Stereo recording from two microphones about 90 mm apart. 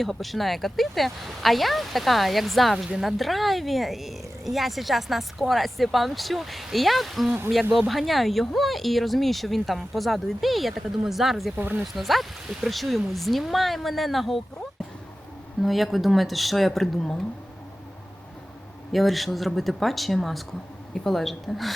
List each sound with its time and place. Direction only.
0.0 s speech: centre (ahead or behind)
11.5 s speech: 20° right (ahead or behind)
11.9 s speech: centre (ahead or behind)
18.9 s speech: centre (ahead or behind)